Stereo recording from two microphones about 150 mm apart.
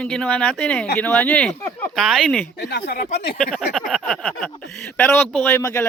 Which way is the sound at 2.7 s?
90° left.